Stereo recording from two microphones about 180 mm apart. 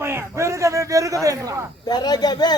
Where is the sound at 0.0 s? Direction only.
15° right (ahead or behind).